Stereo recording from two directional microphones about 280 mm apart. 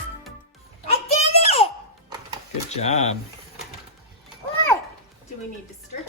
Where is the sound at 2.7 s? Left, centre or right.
Left.